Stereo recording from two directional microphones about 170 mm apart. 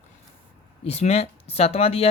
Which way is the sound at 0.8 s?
40° left (ahead or behind).